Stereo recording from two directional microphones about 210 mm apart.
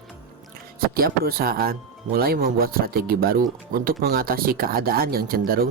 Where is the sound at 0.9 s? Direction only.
45° right (ahead or behind).